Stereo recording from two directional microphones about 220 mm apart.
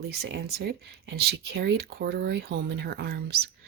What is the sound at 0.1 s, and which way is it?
A woman's voice, 50° right (ahead or behind).